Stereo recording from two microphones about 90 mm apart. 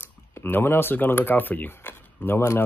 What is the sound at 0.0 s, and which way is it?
Speech, 25° left (ahead or behind).